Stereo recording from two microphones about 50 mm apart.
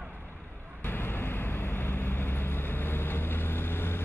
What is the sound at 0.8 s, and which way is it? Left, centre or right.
Vehicle, left.